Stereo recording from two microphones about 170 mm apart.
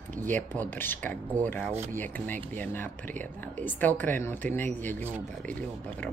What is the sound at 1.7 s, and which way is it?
Speech, 45° right (ahead or behind).